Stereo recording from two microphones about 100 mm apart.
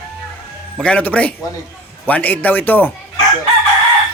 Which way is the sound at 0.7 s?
10° left (ahead or behind).